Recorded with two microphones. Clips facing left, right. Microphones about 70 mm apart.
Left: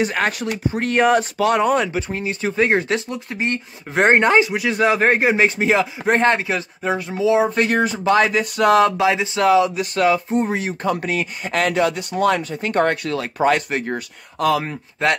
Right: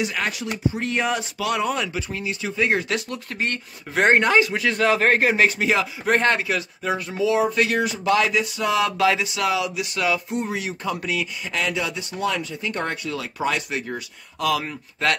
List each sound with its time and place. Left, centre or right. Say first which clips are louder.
0.0 s speech: left 5 dB; left
3.1 s speech: left 4 dB; centre
7.5 s speech: left 3 dB; left
8.5 s a sound: left 11 dB; left
8.9 s speech: left 2 dB; left
9.3 s speech: left 8 dB; left
14.6 s speech: left 4 dB; left